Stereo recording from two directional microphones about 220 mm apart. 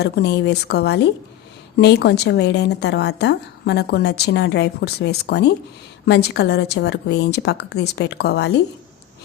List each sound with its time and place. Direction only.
0.0 s a woman's voice: 50° left (ahead or behind)